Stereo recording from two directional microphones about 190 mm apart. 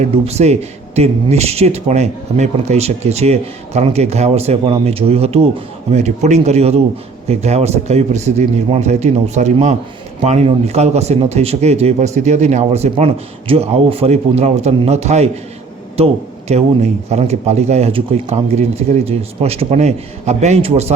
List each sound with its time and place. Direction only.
0.0 s speech: 35° right (ahead or behind)